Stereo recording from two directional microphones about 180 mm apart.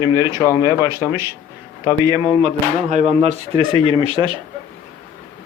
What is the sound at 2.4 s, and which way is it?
Speech, 40° right (ahead or behind).